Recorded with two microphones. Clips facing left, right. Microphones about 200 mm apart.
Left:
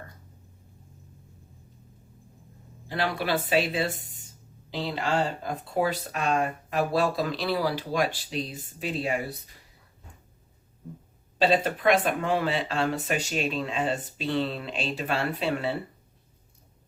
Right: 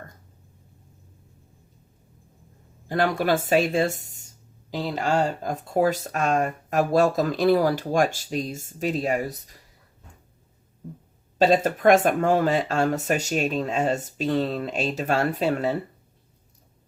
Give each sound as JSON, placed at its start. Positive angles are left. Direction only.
{"t": 2.9, "sound": "speech", "side_deg": -45}
{"t": 11.3, "sound": "speech", "side_deg": -45}